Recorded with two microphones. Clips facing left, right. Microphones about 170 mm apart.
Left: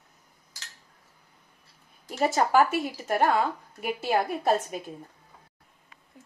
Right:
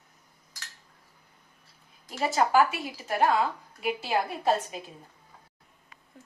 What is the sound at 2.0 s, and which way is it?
A woman's voice, 50° left (ahead or behind).